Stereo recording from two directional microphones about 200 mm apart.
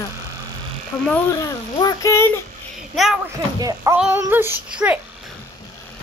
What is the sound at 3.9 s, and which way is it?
A child's voice, 5° right (ahead or behind).